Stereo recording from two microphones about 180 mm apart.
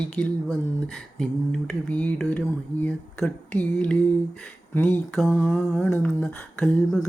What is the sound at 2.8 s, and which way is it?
Speech, 10° left (ahead or behind).